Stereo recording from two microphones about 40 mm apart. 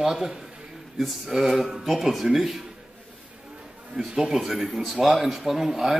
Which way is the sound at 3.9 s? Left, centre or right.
Centre.